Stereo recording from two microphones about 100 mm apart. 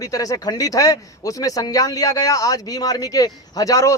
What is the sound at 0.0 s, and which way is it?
A man's voice, 35° left (ahead or behind).